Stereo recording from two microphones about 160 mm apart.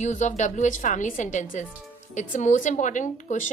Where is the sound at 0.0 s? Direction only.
45° left (ahead or behind).